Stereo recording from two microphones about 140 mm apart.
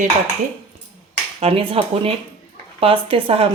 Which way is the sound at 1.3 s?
45° right (ahead or behind).